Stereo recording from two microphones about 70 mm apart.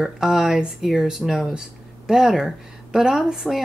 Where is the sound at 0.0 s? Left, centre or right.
Centre.